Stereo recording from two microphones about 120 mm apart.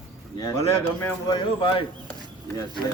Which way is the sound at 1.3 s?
40° left (ahead or behind).